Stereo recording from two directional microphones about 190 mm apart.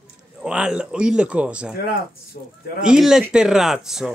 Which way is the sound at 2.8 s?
5° right (ahead or behind).